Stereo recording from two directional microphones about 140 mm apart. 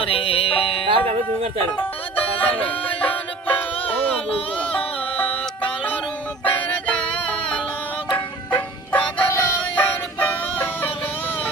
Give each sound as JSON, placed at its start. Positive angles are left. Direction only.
{"t": 0.0, "sound": "music", "side_deg": 40}
{"t": 0.9, "sound": "speech", "side_deg": -45}
{"t": 3.0, "sound": "music", "side_deg": 40}
{"t": 6.4, "sound": "music", "side_deg": 10}